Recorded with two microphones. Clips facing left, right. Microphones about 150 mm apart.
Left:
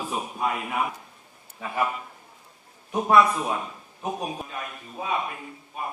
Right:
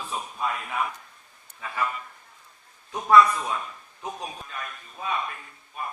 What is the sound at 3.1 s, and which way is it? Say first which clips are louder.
A man's voice: right 1 dB; 20° left (ahead or behind).